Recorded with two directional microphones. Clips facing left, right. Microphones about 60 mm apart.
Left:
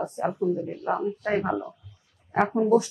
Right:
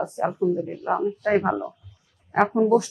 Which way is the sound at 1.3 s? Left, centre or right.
Right.